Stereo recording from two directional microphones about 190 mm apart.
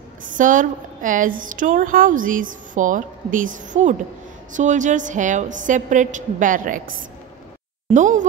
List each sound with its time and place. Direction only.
0.2 s a woman's voice: 45° right (ahead or behind)
7.9 s a woman's voice: 40° right (ahead or behind)